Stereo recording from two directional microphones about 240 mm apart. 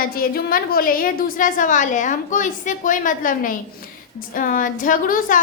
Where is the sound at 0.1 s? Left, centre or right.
Left.